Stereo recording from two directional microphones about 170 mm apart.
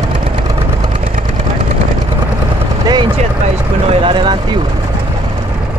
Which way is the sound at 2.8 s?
25° right (ahead or behind).